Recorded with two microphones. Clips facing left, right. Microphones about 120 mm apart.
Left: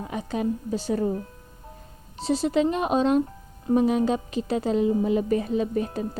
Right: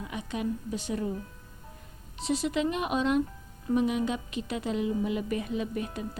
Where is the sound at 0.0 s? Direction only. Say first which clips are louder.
Left 5 dB; 35° left (ahead or behind).